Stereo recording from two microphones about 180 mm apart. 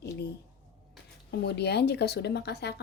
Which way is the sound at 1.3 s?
65° left (ahead or behind).